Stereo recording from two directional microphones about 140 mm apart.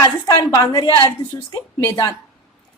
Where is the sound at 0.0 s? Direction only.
25° left (ahead or behind).